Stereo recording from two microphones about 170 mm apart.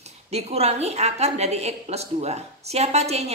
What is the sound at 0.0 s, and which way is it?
A woman's voice, 40° right (ahead or behind).